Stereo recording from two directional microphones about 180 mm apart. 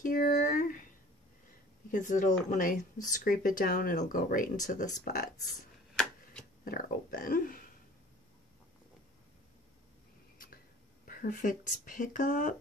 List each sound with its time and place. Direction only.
0.0 s a sound: 50° left (ahead or behind)
1.9 s speech: 45° left (ahead or behind)
6.6 s speech: 50° left (ahead or behind)
11.1 s speech: 50° left (ahead or behind)